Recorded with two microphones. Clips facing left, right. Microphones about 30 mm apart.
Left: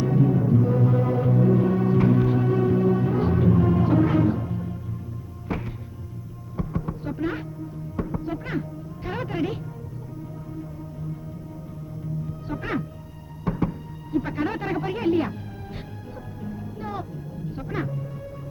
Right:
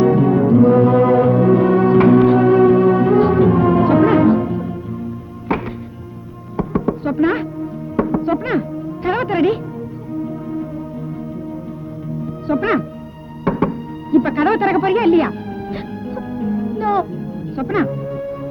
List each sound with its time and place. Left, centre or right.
0.0 s music: right
12.2 s music: right